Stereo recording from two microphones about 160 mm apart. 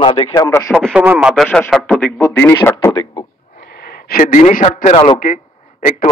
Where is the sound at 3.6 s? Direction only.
70° left (ahead or behind); by 5.0 s 45° left (ahead or behind).